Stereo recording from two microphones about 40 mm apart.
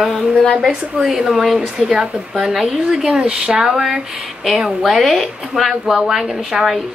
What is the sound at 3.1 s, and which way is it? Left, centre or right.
Speech, centre.